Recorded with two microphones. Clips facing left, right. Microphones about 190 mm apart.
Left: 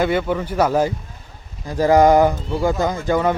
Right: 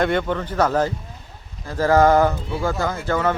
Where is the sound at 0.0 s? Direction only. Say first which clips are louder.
Left 2 dB; 5° left (ahead or behind).